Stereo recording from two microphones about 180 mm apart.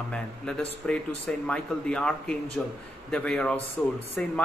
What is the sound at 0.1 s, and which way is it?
A man's voice, 5° left (ahead or behind).